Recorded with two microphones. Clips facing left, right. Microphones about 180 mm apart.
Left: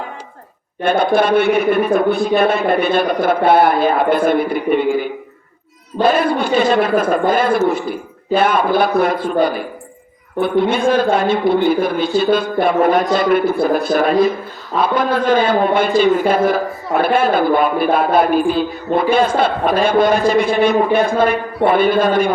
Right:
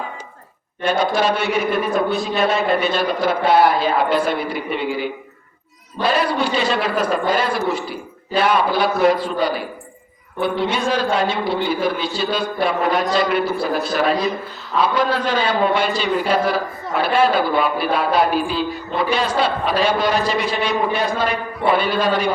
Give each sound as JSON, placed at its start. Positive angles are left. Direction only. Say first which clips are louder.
{"t": 0.8, "sound": "a man's voice", "louder": "left 4 dB", "side_deg": 55}